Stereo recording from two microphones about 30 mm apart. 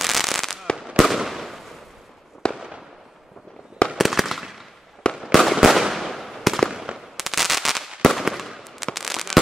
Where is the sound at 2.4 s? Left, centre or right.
Left.